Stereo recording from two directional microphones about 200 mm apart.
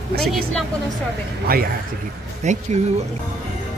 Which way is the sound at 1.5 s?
50° right (ahead or behind).